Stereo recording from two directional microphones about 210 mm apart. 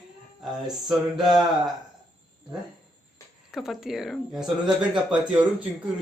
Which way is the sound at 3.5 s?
Centre (ahead or behind).